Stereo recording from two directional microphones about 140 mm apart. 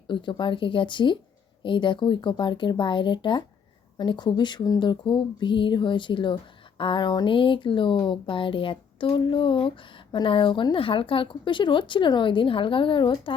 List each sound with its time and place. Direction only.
0.1 s speech: 35° left (ahead or behind)